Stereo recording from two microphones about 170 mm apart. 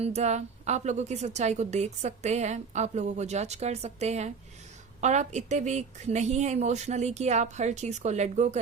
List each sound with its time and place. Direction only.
0.0 s a woman's voice: 40° right (ahead or behind)